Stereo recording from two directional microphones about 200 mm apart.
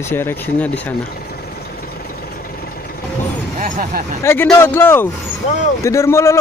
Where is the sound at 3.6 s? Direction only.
45° right (ahead or behind).